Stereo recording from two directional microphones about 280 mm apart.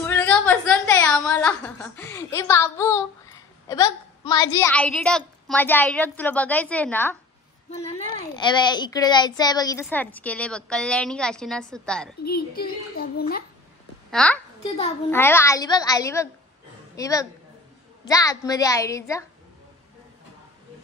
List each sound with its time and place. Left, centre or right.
0.0 s a sound: centre
4.6 s a woman's voice: centre
12.3 s a woman's voice: left
14.1 s a child's voice: centre